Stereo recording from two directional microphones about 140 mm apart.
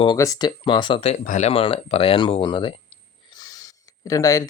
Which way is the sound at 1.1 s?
55° left (ahead or behind).